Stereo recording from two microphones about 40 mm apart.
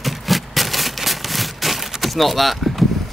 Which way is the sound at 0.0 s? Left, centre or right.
Centre.